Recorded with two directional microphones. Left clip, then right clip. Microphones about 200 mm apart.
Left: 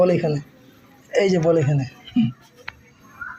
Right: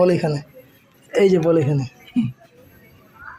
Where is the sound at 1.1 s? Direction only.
30° right (ahead or behind).